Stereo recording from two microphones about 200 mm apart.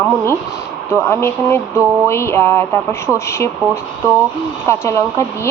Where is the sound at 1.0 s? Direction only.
10° left (ahead or behind).